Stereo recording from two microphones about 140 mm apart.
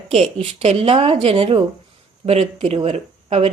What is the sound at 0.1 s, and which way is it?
A woman's voice, 45° right (ahead or behind).